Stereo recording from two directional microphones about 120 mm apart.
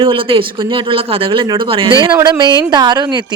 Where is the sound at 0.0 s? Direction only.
45° right (ahead or behind).